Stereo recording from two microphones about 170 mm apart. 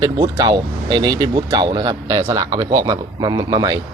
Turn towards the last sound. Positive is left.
turn(degrees=-25)  # may be behind; listen again after turning